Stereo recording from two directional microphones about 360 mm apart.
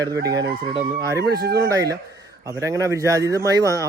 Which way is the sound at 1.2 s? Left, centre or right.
Right.